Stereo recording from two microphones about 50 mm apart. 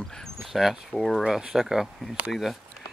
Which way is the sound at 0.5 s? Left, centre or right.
Centre.